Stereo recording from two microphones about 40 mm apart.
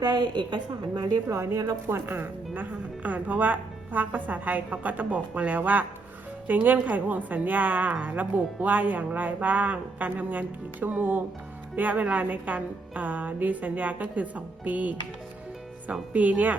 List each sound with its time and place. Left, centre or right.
1.4 s a woman's voice: right
2.6 s a woman's voice: right